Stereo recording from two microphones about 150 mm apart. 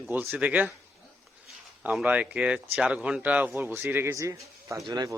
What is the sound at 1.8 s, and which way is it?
Speech, 5° right (ahead or behind).